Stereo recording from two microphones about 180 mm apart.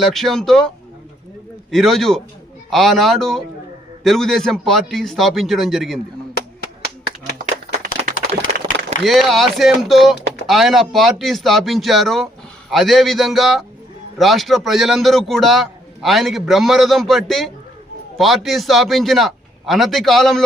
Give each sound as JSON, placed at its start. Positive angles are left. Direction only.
{"t": 0.0, "sound": "a man's voice", "side_deg": 0}
{"t": 1.7, "sound": "a man's voice", "side_deg": 0}
{"t": 7.3, "sound": "a sound", "side_deg": -45}
{"t": 9.0, "sound": "a man's voice", "side_deg": 0}